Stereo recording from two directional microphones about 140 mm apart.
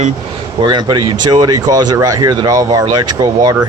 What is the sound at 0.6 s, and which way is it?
Speech, 30° right (ahead or behind).